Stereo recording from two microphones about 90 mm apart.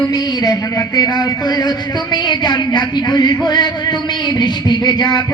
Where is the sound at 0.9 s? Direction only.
45° left (ahead or behind).